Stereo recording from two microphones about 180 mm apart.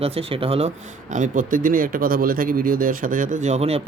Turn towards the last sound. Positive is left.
turn(degrees=-35)  # may be behind; listen again after turning